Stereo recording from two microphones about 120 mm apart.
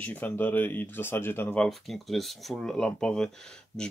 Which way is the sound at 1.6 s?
Centre (ahead or behind).